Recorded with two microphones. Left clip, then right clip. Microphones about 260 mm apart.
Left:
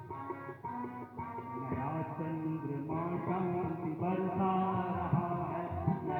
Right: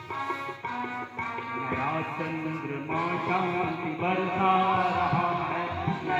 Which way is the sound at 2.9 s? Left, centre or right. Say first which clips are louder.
Right 10 dB; centre.